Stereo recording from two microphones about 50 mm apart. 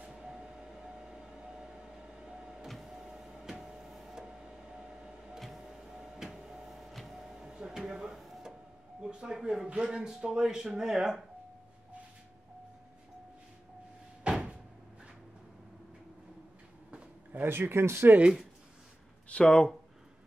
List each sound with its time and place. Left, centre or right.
0.2 s train: centre
1.3 s power windows: centre
5.4 s printer: centre
9.1 s a sound: centre
9.7 s speech: centre
14.2 s cupboard open or close: centre
17.5 s speech: right
19.2 s speech: centre